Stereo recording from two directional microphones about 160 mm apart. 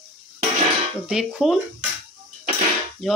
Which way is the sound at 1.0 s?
5° right (ahead or behind).